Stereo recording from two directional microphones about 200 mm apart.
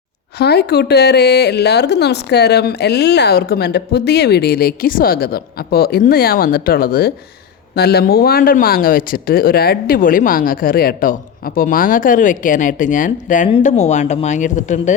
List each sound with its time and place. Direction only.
0.3 s a woman's voice: 55° left (ahead or behind); by 14.9 s 40° left (ahead or behind)